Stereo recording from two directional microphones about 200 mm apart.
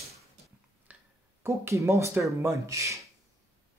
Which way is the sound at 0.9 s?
10° right (ahead or behind).